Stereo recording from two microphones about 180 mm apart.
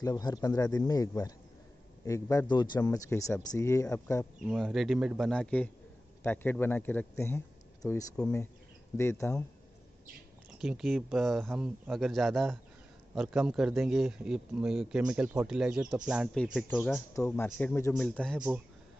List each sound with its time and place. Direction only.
0.0 s a man's voice: 20° left (ahead or behind)
4.5 s a man's voice: centre (ahead or behind); by 9.4 s 15° left (ahead or behind)
10.6 s a man's voice: centre (ahead or behind)
17.2 s a man's voice: 15° left (ahead or behind)